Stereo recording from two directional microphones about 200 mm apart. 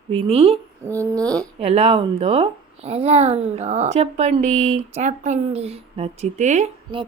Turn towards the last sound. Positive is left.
turn(degrees=-30)  # may be behind; listen again after turning